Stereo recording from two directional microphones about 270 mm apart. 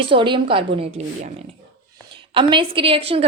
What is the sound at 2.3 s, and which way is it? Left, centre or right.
Speech, centre.